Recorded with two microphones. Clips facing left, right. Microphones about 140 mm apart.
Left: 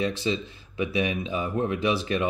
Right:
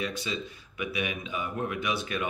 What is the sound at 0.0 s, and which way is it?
Speech, 30° left (ahead or behind).